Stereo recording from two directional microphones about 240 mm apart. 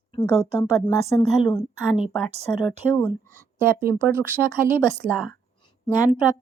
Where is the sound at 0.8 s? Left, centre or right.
Centre.